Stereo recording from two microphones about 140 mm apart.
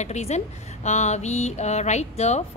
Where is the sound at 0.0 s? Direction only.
55° left (ahead or behind).